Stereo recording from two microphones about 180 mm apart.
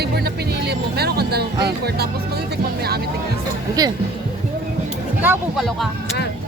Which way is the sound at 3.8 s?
20° right (ahead or behind).